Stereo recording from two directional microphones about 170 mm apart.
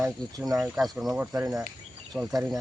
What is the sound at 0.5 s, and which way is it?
Speech, 5° right (ahead or behind).